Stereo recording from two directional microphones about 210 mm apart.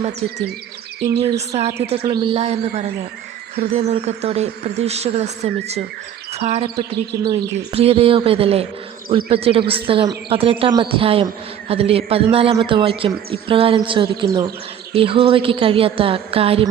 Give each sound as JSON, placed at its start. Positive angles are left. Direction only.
{"t": 0.0, "sound": "speech", "side_deg": -30}